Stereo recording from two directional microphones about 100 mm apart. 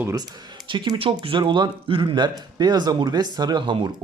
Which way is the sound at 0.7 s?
55° right (ahead or behind).